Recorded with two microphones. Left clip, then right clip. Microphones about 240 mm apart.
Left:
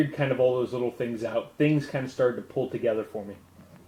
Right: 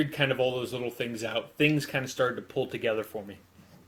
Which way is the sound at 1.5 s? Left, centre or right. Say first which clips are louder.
Right 2 dB; right.